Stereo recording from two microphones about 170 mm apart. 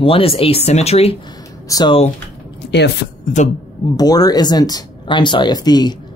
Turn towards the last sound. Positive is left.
turn(degrees=25)  # may be behind; listen again after turning